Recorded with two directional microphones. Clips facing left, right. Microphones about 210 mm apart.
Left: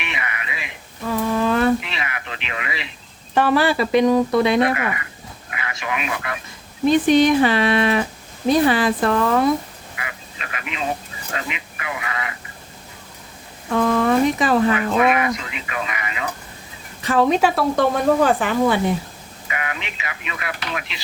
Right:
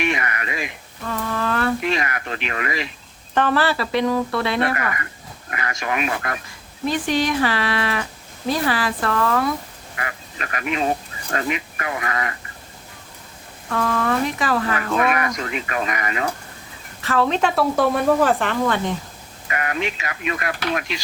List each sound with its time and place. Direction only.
0.0 s speech: 45° right (ahead or behind)
1.0 s speech: 10° left (ahead or behind)
1.8 s speech: 45° right (ahead or behind)
3.3 s speech: 10° left (ahead or behind)
5.5 s speech: 45° right (ahead or behind)
6.8 s speech: 20° left (ahead or behind)
10.0 s speech: 45° right (ahead or behind)
13.7 s speech: 20° left (ahead or behind)
15.4 s speech: 45° right (ahead or behind)
17.0 s speech: 15° left (ahead or behind)
17.5 s speech: centre (ahead or behind)
19.5 s speech: 45° right (ahead or behind)